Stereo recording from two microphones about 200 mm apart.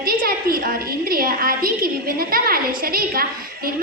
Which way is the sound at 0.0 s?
50° right (ahead or behind).